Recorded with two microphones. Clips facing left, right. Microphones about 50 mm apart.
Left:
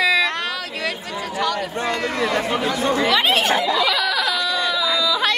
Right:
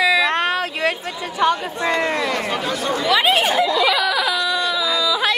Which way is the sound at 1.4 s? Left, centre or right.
Right.